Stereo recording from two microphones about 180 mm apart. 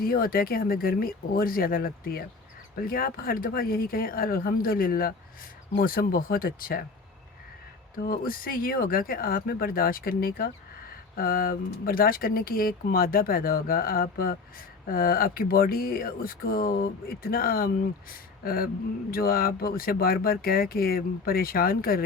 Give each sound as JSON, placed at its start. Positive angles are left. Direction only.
{"t": 0.0, "sound": "speech", "side_deg": 55}
{"t": 7.9, "sound": "speech", "side_deg": 55}